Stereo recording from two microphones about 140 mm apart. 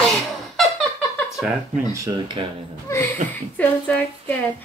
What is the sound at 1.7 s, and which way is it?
Speech, 25° right (ahead or behind).